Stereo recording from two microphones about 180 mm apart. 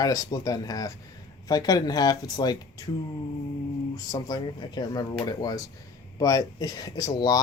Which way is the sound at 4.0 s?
20° left (ahead or behind).